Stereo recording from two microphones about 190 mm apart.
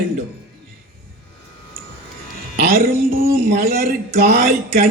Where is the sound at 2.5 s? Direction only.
50° right (ahead or behind).